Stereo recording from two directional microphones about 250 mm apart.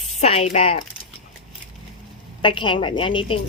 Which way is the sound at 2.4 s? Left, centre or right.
Centre.